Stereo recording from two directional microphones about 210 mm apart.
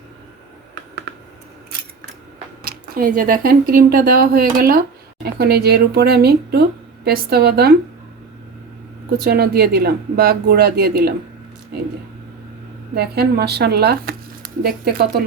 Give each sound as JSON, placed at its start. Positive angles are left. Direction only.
{"t": 1.1, "sound": "scissors", "side_deg": -55}
{"t": 2.6, "sound": "speech", "side_deg": -45}
{"t": 9.2, "sound": "speech", "side_deg": -50}
{"t": 13.0, "sound": "speech", "side_deg": -50}